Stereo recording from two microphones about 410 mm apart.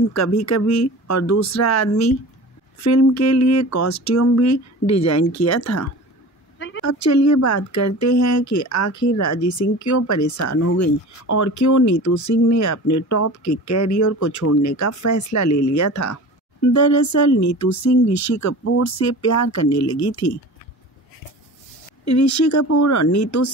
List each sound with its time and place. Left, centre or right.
0.1 s speech: left
22.0 s speech: left